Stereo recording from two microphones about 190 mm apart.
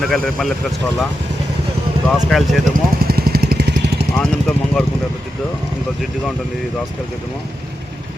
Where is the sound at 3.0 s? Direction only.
55° right (ahead or behind).